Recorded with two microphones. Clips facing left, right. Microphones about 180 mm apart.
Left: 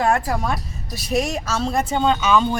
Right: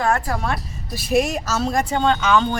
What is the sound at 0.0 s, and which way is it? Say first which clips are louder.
Speech: left 1 dB; 20° left (ahead or behind).